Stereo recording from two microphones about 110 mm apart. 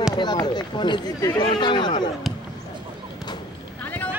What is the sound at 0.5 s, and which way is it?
Speech, 45° left (ahead or behind).